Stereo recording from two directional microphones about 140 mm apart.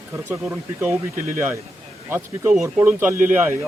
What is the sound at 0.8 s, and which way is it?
Speech, 15° right (ahead or behind).